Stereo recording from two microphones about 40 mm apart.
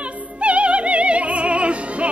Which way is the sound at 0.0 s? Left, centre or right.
Right.